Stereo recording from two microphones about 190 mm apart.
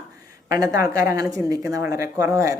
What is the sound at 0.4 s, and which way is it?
Speech, 20° right (ahead or behind).